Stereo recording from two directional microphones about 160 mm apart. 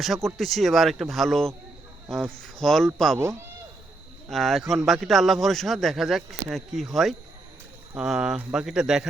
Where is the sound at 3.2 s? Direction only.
15° right (ahead or behind).